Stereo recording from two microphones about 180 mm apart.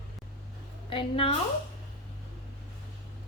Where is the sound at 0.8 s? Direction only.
30° left (ahead or behind).